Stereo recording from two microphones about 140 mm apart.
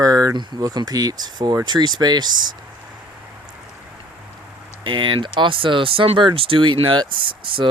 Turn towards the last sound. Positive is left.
turn(degrees=-35)  # may be behind; listen again after turning